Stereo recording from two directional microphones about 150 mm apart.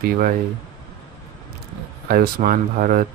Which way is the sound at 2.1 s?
80° right.